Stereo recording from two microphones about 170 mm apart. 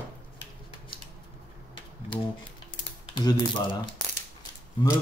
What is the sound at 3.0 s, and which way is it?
Speech, 25° left (ahead or behind).